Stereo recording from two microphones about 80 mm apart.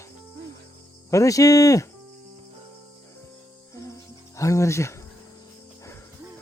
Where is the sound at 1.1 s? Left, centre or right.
Left.